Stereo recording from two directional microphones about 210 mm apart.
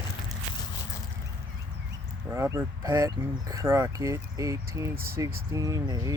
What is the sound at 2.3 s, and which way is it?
Speech, 15° right (ahead or behind).